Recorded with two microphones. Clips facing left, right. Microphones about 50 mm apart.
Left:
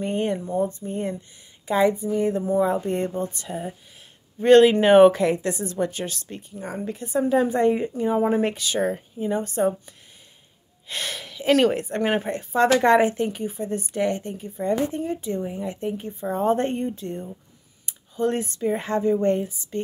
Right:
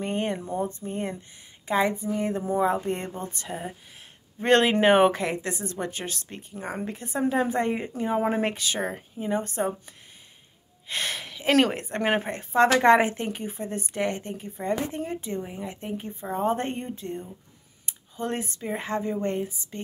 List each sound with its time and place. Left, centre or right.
0.0 s speech: centre
0.8 s speech: right
2.7 s speech: centre
3.2 s a woman's voice: right
7.5 s speech: right
8.5 s a woman's voice: right
8.8 s speech: centre
9.4 s a woman's voice: right
10.9 s speech: right
12.3 s a woman's voice: right
14.3 s speech: right
15.3 s speech: centre
17.8 s a sound: centre
18.7 s speech: centre